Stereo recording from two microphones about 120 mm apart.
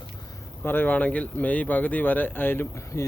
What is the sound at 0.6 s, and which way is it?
Speech, 15° left (ahead or behind).